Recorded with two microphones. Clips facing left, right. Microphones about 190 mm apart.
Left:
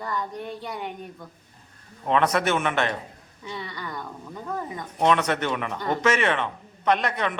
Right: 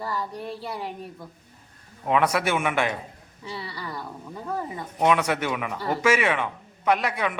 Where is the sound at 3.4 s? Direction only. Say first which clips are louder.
Even; 30° right (ahead or behind).